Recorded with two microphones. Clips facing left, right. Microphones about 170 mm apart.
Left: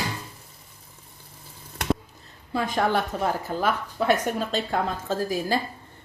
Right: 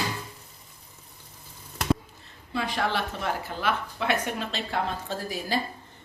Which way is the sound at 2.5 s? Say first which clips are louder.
Left 4 dB; 45° left (ahead or behind).